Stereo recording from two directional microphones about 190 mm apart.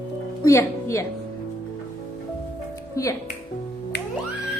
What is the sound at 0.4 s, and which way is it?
Speech, 15° left (ahead or behind).